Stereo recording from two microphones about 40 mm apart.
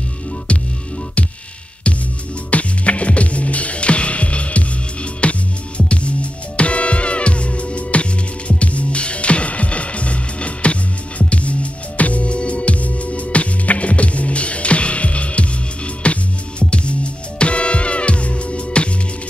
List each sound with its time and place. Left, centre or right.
0.5 s hum: left
2.5 s music: left